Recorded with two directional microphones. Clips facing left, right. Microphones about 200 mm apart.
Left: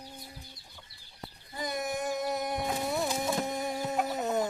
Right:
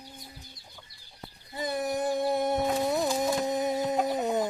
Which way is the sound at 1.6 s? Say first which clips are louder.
Right 4 dB; 30° right (ahead or behind).